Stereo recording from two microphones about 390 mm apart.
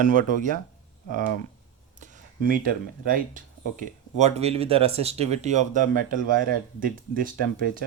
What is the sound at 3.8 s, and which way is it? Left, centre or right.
Speech, centre.